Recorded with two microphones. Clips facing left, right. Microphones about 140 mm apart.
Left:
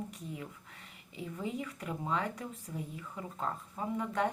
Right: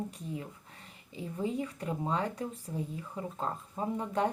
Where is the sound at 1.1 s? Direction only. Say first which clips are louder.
Right 4 dB; 30° right (ahead or behind).